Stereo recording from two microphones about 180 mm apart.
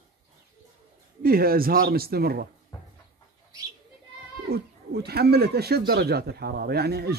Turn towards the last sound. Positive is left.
turn(degrees=-65)  # may be behind; listen again after turning